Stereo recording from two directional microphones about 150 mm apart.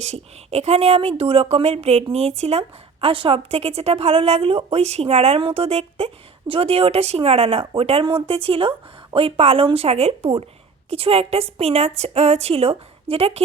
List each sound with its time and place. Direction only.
0.0 s a woman's voice: 50° right (ahead or behind)